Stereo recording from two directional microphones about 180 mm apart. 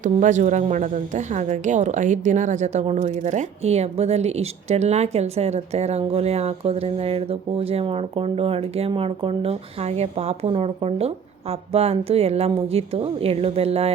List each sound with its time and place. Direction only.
0.0 s speech: 45° right (ahead or behind)